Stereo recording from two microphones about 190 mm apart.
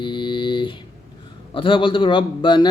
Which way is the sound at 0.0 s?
25° left (ahead or behind).